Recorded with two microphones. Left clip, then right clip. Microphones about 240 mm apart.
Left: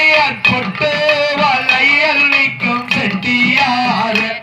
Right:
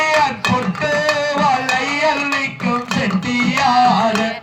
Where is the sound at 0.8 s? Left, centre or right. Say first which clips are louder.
Left 4 dB; right.